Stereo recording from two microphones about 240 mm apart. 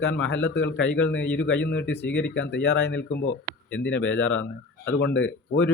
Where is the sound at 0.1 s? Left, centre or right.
Left.